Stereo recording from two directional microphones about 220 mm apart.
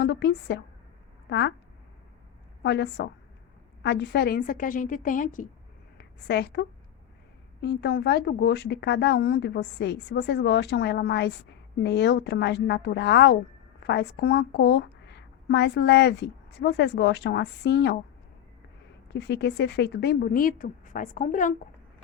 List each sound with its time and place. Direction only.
0.0 s speech: 50° left (ahead or behind)
2.6 s a woman's voice: 50° left (ahead or behind); by 5.5 s 35° left (ahead or behind)
6.0 s a woman's voice: 50° left (ahead or behind)
19.1 s speech: 50° left (ahead or behind)